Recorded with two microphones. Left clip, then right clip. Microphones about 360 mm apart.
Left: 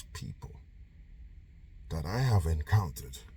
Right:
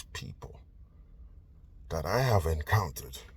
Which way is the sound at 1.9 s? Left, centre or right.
Centre.